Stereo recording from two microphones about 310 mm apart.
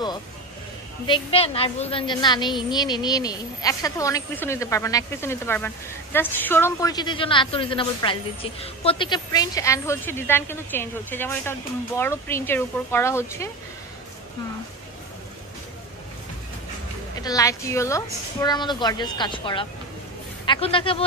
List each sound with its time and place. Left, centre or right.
1.0 s a woman's voice: centre
17.2 s a woman's voice: centre